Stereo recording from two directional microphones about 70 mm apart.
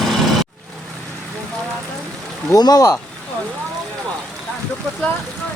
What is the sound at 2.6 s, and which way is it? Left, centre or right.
Speech, left.